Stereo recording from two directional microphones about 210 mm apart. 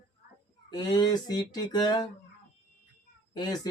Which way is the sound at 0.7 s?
20° left (ahead or behind).